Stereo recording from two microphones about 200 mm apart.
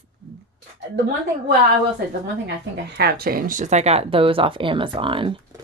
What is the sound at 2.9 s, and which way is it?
Speech, 50° right (ahead or behind).